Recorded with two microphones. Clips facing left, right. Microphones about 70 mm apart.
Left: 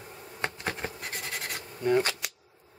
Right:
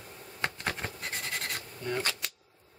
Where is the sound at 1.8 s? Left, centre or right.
Centre.